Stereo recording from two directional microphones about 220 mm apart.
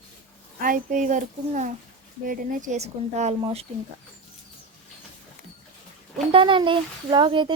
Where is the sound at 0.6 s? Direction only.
40° right (ahead or behind).